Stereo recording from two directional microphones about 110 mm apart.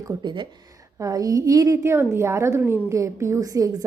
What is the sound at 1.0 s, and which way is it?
A woman's voice, 35° right (ahead or behind).